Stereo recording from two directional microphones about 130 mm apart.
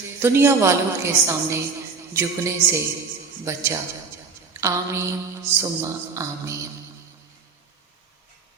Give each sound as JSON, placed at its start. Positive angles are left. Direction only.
{"t": 0.2, "sound": "a woman's voice", "side_deg": -20}